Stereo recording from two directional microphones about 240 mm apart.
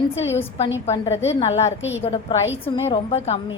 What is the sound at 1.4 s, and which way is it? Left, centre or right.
Speech, left.